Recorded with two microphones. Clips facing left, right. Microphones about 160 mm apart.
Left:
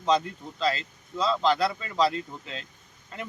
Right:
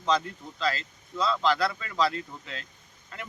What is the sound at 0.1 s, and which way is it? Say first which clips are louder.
Speech: left 2 dB; 25° left (ahead or behind).